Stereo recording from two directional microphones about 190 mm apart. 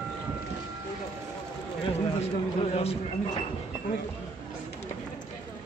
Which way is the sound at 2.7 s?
30° left (ahead or behind).